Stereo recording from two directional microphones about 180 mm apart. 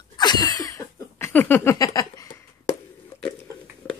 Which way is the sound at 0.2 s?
25° left (ahead or behind).